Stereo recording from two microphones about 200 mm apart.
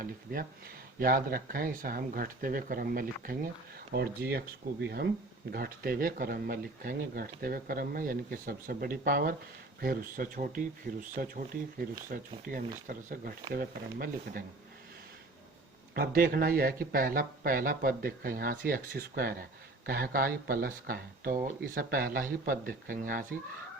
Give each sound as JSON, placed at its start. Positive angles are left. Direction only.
{"t": 0.0, "sound": "speech", "side_deg": -45}
{"t": 16.0, "sound": "speech", "side_deg": -45}